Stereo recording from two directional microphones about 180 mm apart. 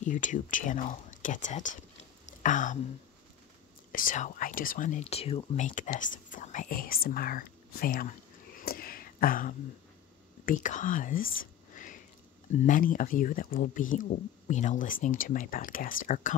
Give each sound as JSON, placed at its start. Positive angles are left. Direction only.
{"t": 0.0, "sound": "speech", "side_deg": 45}
{"t": 3.9, "sound": "speech", "side_deg": 50}